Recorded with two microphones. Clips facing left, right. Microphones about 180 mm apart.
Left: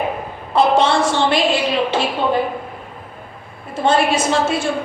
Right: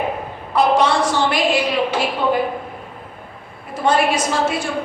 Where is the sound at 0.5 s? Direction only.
25° left (ahead or behind).